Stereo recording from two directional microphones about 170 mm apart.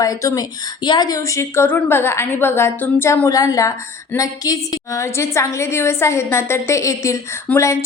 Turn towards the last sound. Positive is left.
turn(degrees=15)  # may be behind; listen again after turning